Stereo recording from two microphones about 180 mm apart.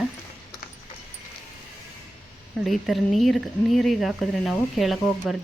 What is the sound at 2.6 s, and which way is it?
Speech, centre (ahead or behind).